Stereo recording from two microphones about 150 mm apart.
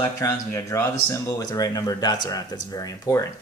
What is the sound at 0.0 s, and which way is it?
Speech, 20° left (ahead or behind).